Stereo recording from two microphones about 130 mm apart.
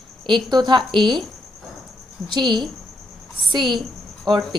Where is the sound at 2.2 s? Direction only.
35° right (ahead or behind).